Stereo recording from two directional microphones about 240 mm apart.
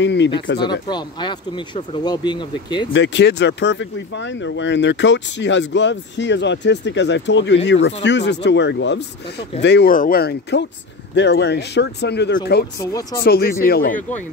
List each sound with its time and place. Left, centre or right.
0.0 s speech: left
0.7 s speech: centre
2.9 s speech: left